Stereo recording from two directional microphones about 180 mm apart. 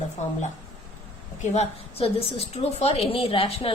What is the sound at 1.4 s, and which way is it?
A woman's voice, 40° left (ahead or behind).